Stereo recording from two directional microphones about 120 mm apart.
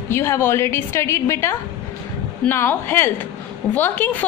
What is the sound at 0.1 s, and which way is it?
A woman's voice, 20° left (ahead or behind).